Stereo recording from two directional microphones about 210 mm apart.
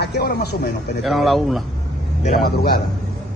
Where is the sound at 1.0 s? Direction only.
Centre (ahead or behind).